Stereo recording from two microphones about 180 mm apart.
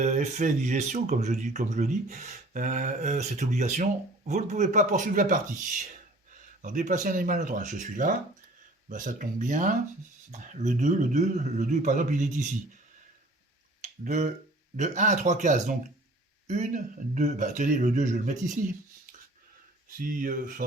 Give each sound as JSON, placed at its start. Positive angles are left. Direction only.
{"t": 0.0, "sound": "speech", "side_deg": -40}
{"t": 13.8, "sound": "speech", "side_deg": -40}
{"t": 20.0, "sound": "speech", "side_deg": -50}